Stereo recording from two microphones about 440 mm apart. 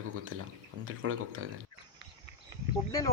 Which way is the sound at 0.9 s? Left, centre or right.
Right.